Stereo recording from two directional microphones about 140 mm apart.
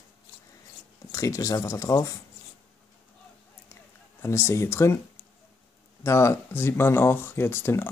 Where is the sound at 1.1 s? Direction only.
20° left (ahead or behind).